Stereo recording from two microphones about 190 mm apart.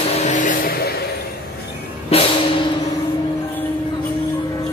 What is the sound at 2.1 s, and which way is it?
Music, 30° left (ahead or behind).